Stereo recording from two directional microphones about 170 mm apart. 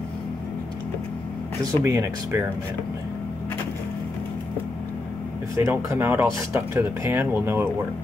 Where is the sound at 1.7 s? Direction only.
20° right (ahead or behind).